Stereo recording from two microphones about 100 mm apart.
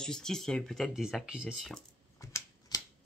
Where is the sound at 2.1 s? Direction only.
30° left (ahead or behind).